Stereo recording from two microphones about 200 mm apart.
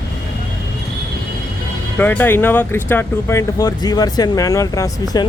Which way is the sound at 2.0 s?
10° left (ahead or behind).